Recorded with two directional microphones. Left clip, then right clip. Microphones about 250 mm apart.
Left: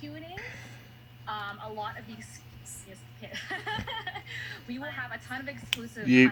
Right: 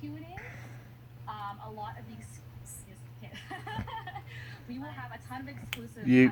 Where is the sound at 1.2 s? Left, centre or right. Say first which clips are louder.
Left 4 dB; left.